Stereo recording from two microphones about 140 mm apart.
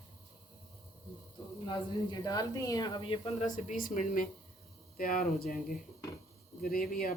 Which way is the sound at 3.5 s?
75° left (ahead or behind).